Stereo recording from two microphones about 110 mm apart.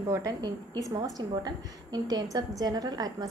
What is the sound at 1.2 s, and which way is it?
A woman's voice, 35° right (ahead or behind).